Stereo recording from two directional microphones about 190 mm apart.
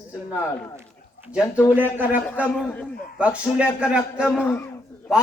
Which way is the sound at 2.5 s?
5° left (ahead or behind).